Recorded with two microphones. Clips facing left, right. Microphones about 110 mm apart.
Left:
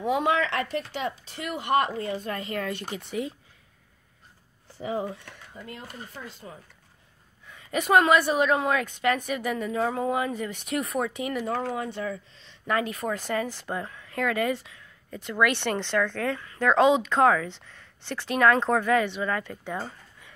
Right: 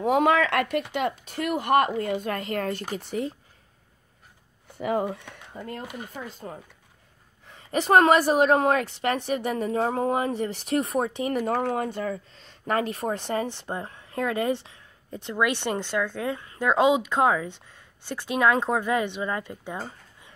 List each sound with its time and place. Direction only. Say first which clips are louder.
0.0 s a woman's voice: right 4 dB; 55° right (ahead or behind); by 3.3 s 35° right (ahead or behind)
4.6 s a sound: right 4 dB; 60° right (ahead or behind)
5.5 s speech: right 6 dB; 55° right (ahead or behind)
7.4 s a woman's voice: right 2 dB; 30° right (ahead or behind)
8.8 s a woman's voice: left 1 dB; 30° right (ahead or behind)
11.3 s speech: right 4 dB; 50° right (ahead or behind); by 19.8 s 15° right (ahead or behind)
19.8 s a sound: even; 20° right (ahead or behind)